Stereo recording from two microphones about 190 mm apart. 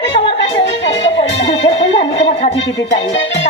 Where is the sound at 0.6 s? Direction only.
70° left (ahead or behind).